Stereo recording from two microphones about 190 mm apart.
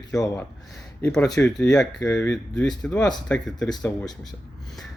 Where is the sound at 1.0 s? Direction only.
5° left (ahead or behind).